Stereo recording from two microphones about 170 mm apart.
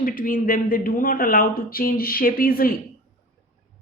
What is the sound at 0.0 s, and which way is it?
Speech, 55° left (ahead or behind).